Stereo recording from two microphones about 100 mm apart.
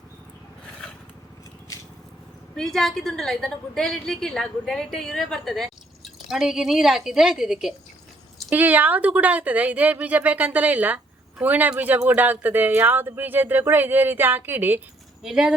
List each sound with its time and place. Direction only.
2.6 s a woman's voice: 5° left (ahead or behind)
8.4 s speech: 15° right (ahead or behind)
15.2 s speech: 5° right (ahead or behind)